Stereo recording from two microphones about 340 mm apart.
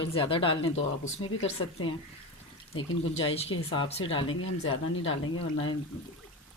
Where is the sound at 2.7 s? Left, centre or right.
Left.